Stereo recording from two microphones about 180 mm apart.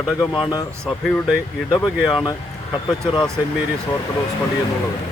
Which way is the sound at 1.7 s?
25° left (ahead or behind).